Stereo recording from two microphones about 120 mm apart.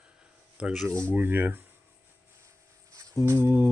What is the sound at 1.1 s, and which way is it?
Speech, 15° right (ahead or behind).